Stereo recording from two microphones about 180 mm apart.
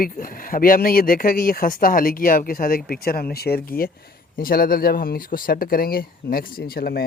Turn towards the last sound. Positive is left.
turn(degrees=55)  # may be behind; listen again after turning